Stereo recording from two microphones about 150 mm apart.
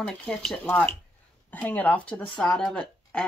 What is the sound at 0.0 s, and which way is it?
Speech, 5° left (ahead or behind).